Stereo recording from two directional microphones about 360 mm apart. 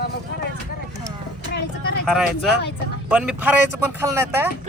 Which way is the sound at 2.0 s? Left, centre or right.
Centre.